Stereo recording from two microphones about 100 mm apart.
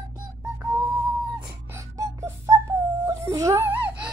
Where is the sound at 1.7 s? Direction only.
30° right (ahead or behind).